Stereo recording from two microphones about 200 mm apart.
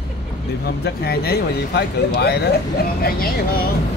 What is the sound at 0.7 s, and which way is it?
Speech, 50° left (ahead or behind).